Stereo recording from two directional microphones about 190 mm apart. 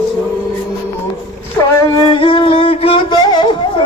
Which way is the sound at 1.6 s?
15° left (ahead or behind).